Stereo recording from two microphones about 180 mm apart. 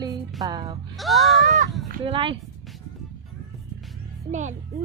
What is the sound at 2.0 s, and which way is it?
Speech, 30° right (ahead or behind).